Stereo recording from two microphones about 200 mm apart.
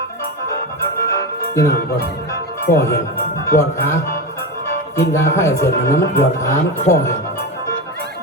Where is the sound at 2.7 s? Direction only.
15° left (ahead or behind).